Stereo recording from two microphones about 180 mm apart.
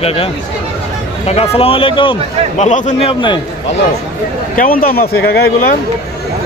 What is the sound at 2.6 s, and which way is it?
Speech, 40° left (ahead or behind).